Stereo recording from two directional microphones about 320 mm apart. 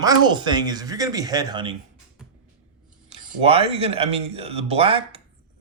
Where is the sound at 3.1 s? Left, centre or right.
Centre.